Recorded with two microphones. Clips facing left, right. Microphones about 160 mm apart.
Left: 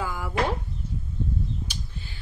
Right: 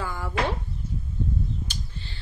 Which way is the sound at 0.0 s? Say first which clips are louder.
Left 1 dB; 10° left (ahead or behind).